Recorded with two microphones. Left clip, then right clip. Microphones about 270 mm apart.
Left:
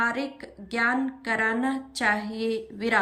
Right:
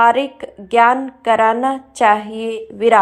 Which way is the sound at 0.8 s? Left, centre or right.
Centre.